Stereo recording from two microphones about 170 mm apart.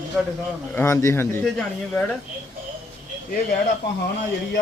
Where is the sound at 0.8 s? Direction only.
20° left (ahead or behind).